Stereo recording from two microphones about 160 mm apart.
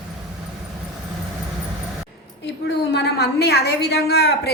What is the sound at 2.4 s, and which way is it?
A woman's voice, 90° left.